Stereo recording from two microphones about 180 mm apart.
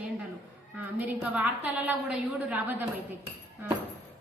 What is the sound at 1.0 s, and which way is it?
A woman's voice, 10° right (ahead or behind).